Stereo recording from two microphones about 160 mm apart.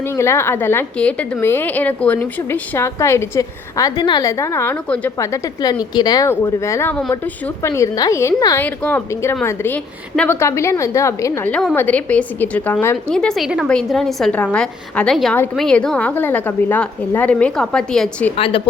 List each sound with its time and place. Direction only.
0.0 s a woman's voice: 15° left (ahead or behind)
18.3 s speech: 35° left (ahead or behind)